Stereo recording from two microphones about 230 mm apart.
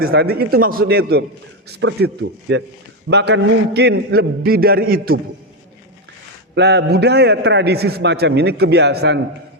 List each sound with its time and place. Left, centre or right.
0.0 s a man's voice: right
6.5 s a man's voice: right